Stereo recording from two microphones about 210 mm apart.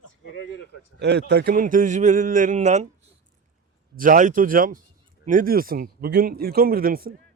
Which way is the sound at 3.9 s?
40° right (ahead or behind).